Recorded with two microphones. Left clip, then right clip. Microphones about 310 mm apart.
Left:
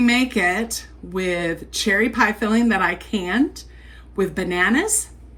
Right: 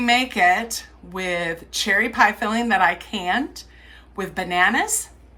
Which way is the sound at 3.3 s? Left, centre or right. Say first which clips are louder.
Left 3 dB; right.